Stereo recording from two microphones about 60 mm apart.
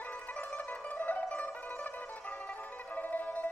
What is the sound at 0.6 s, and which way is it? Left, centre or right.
Zither, left.